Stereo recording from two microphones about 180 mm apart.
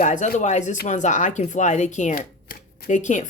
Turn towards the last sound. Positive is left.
turn(degrees=40)  # may be behind; listen again after turning